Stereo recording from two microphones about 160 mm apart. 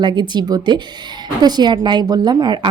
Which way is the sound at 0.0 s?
25° right (ahead or behind).